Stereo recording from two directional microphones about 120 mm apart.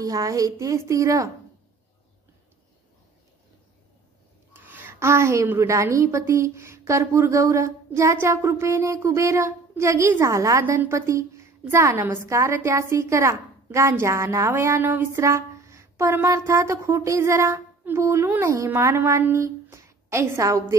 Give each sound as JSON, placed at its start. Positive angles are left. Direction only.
{"t": 0.0, "sound": "a woman's voice", "side_deg": -30}
{"t": 4.6, "sound": "a woman's voice", "side_deg": -15}